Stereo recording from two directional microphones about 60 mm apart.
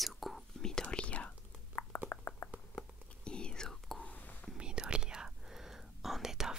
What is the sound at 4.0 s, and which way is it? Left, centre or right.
Whispering, left.